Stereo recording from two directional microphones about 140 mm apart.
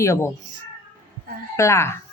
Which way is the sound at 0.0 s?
20° left (ahead or behind).